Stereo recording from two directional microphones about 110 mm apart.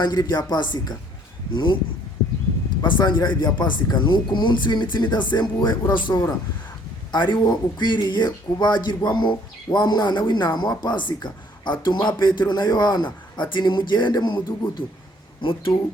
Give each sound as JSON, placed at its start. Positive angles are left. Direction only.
{"t": 0.0, "sound": "a man's voice", "side_deg": 40}
{"t": 2.8, "sound": "a man's voice", "side_deg": 40}